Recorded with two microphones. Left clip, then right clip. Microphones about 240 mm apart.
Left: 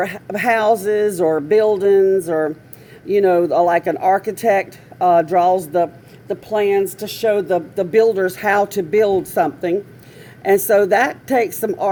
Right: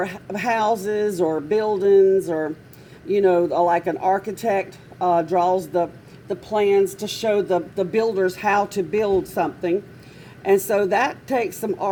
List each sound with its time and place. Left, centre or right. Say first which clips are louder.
0.0 s speech: left 6 dB; left